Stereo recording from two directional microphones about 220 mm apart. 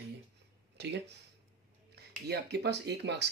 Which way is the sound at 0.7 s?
50° right (ahead or behind).